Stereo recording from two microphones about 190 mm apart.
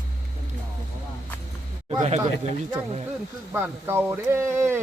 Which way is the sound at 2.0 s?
35° right (ahead or behind).